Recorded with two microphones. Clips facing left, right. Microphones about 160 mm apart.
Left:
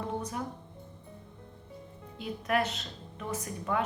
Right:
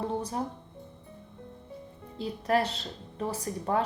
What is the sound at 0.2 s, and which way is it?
Speech, 30° right (ahead or behind).